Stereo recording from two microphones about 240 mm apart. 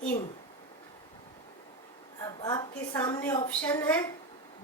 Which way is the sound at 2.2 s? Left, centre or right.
Centre.